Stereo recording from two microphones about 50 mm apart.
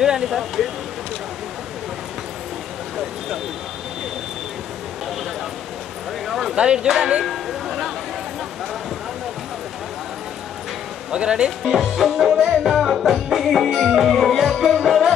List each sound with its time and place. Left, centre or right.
0.0 s speech: centre
6.2 s a sound: centre
6.5 s speech: centre
7.2 s a sound: centre
11.1 s speech: centre
11.7 s music: centre